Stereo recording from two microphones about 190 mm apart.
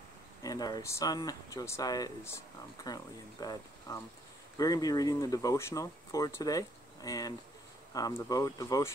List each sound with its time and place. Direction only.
0.4 s speech: 20° left (ahead or behind)